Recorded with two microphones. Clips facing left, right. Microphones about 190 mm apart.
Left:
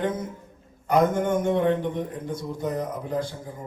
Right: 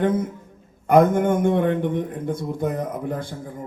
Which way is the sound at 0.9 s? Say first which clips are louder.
Right 5 dB; 55° right (ahead or behind).